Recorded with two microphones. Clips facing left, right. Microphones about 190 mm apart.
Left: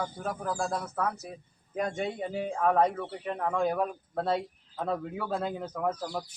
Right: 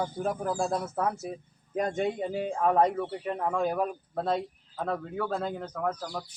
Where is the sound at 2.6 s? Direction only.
10° right (ahead or behind).